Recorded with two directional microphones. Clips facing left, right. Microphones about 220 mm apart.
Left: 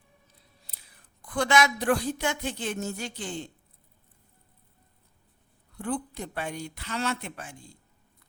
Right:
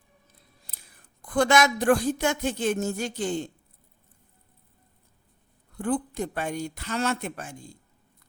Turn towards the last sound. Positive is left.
turn(degrees=-45)  # may be behind; listen again after turning